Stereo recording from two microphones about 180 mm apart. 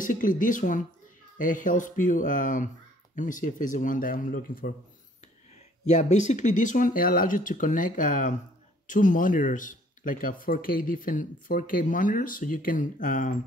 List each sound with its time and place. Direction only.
0.0 s speech: 45° left (ahead or behind)
5.9 s speech: 40° left (ahead or behind)